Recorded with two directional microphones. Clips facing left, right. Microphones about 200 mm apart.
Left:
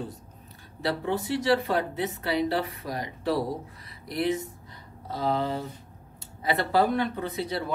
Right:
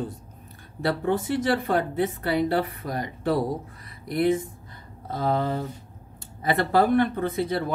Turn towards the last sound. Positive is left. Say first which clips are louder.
# right 5 dB
turn(degrees=-50)  # may be behind; listen again after turning